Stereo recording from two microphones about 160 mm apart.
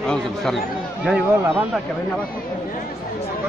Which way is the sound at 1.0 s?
5° right (ahead or behind).